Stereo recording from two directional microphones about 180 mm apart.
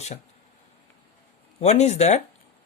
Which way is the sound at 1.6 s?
40° left (ahead or behind).